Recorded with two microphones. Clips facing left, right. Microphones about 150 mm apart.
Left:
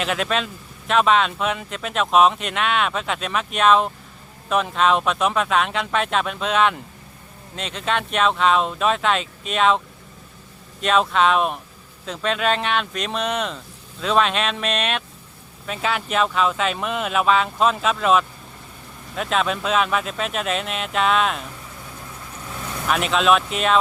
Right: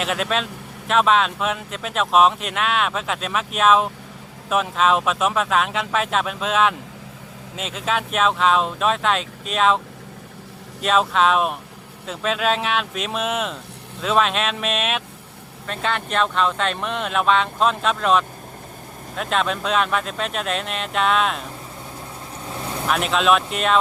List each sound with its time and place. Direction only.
0.0 s speech: centre (ahead or behind)
22.4 s vehicle: 30° right (ahead or behind)
22.9 s speech: centre (ahead or behind)